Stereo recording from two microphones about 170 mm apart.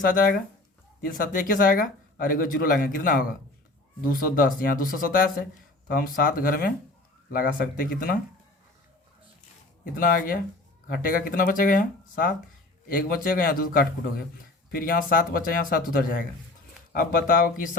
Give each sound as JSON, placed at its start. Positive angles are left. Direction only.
{"t": 0.0, "sound": "speech", "side_deg": 55}
{"t": 9.8, "sound": "speech", "side_deg": 55}